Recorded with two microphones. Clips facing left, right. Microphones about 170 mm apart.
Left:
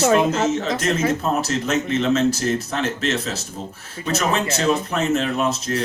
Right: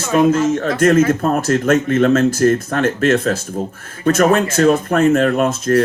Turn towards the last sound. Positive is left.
turn(degrees=-50)  # may be behind; listen again after turning